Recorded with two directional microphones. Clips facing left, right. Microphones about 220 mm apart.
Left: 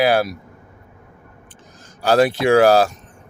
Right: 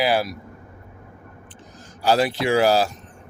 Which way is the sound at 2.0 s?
55° left (ahead or behind).